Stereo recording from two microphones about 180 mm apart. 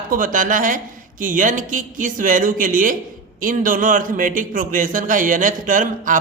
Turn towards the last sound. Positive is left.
turn(degrees=-45)  # may be behind; listen again after turning